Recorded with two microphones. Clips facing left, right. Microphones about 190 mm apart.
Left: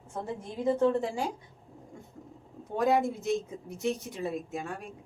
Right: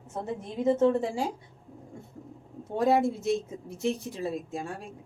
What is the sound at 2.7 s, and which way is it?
Speech, 25° right (ahead or behind).